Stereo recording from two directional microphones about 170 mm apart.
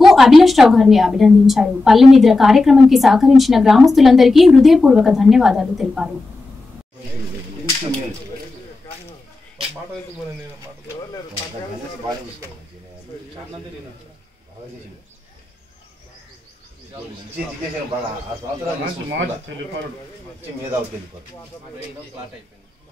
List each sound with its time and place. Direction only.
0.0 s a woman's voice: centre (ahead or behind)